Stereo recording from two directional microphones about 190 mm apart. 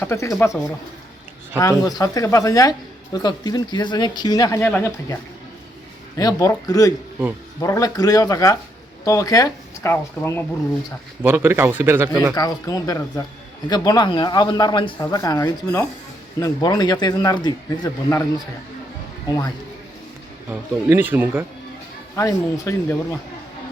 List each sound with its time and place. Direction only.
0.0 s speech: 15° left (ahead or behind)
1.5 s speech: 20° left (ahead or behind)
6.1 s speech: 20° left (ahead or behind)
11.2 s speech: 10° right (ahead or behind)
12.3 s speech: 20° left (ahead or behind)
20.5 s speech: 10° right (ahead or behind)
22.1 s speech: 15° left (ahead or behind)